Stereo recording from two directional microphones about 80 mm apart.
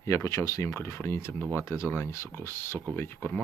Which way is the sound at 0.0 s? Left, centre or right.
Left.